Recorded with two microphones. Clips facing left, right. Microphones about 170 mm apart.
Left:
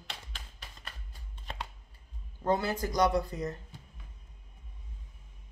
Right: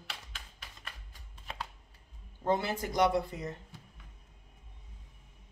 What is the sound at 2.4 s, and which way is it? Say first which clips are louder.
Speech: left 1 dB; 20° right (ahead or behind).